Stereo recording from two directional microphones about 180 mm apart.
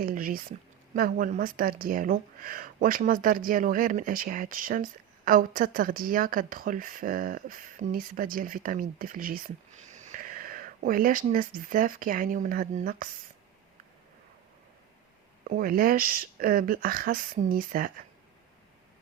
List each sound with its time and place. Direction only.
0.0 s speech: 50° right (ahead or behind)
15.4 s speech: 50° right (ahead or behind)